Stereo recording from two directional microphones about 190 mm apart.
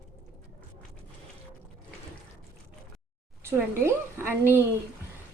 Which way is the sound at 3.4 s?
10° right (ahead or behind).